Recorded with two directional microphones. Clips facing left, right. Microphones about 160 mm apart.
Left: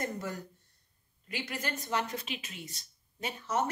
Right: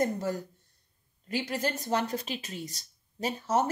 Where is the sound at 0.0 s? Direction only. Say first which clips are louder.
Right 7 dB; 35° right (ahead or behind).